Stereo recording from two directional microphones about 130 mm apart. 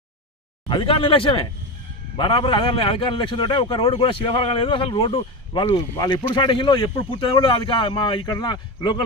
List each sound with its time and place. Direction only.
0.7 s a man's voice: 45° left (ahead or behind)